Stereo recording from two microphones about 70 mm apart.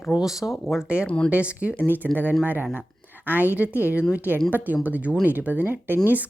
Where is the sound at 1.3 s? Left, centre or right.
Centre.